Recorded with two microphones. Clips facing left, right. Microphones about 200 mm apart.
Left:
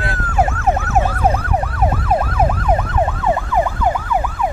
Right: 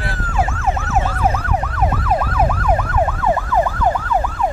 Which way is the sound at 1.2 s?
30° left (ahead or behind).